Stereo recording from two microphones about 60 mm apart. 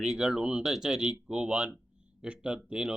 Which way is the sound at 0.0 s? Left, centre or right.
Centre.